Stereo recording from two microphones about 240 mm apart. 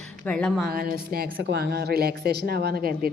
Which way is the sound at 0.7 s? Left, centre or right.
Right.